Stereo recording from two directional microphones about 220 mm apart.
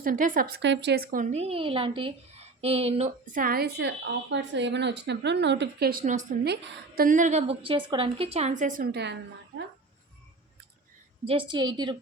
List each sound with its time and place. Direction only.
0.0 s a woman's voice: 40° right (ahead or behind)
11.3 s a woman's voice: 20° right (ahead or behind)